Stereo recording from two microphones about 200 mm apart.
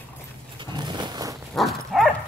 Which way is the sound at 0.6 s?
20° right (ahead or behind).